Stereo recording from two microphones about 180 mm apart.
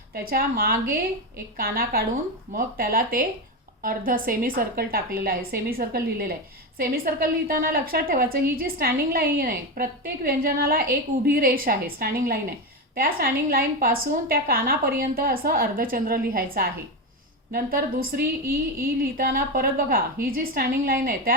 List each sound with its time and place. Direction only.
0.1 s a woman's voice: 55° right (ahead or behind)